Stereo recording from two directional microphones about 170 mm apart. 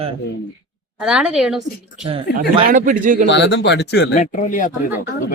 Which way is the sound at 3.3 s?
90° left.